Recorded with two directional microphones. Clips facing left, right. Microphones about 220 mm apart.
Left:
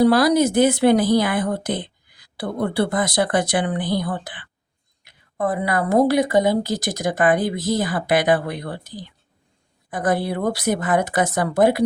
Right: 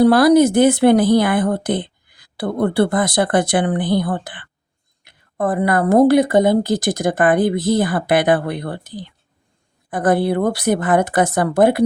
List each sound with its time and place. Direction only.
0.0 s speech: 55° right (ahead or behind)